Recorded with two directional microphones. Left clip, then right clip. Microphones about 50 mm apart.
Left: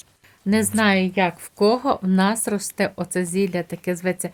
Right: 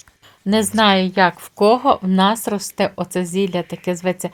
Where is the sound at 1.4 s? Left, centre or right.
Right.